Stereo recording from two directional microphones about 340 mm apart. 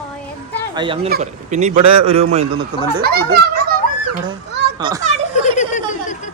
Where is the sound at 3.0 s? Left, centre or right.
Right.